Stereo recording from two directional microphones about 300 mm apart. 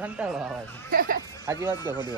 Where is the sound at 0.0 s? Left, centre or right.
Centre.